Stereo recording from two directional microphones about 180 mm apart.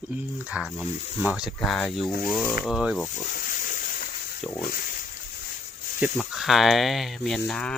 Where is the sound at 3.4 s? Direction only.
50° left (ahead or behind).